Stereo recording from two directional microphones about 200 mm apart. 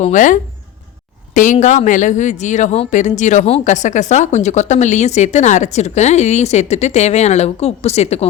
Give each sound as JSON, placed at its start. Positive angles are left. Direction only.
{"t": 0.0, "sound": "speech", "side_deg": 40}